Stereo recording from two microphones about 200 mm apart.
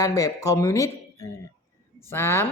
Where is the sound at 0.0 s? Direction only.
15° left (ahead or behind).